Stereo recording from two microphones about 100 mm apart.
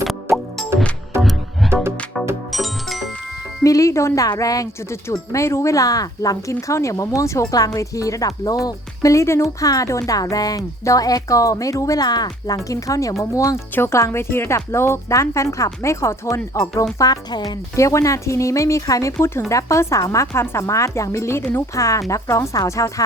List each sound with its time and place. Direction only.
0.3 s music: 25° right (ahead or behind)
1.2 s music: centre (ahead or behind)
3.6 s speech: 35° left (ahead or behind)
17.0 s speech: 40° left (ahead or behind)
17.7 s speech: 30° left (ahead or behind)